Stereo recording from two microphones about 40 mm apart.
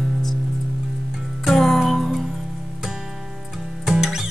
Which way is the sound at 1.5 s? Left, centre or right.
Centre.